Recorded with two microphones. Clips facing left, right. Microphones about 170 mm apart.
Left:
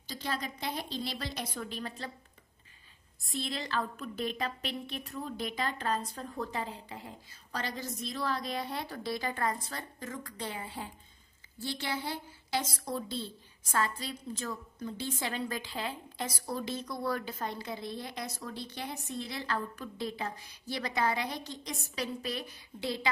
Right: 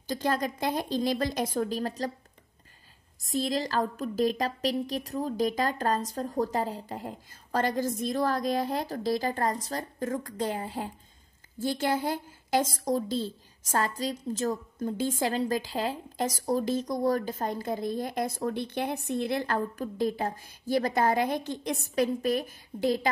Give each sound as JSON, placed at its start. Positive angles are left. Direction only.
{"t": 0.0, "sound": "a woman's voice", "side_deg": -50}
{"t": 3.2, "sound": "a woman's voice", "side_deg": -40}